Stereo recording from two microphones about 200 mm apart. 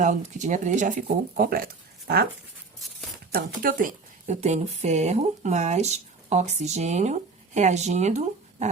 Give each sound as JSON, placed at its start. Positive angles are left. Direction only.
{"t": 0.0, "sound": "speech", "side_deg": -35}
{"t": 3.3, "sound": "speech", "side_deg": -45}